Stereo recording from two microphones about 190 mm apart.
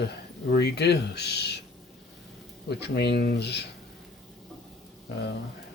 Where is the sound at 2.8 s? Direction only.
60° left (ahead or behind).